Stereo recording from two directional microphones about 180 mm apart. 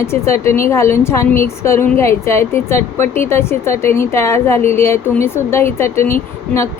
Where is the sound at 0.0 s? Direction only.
15° left (ahead or behind).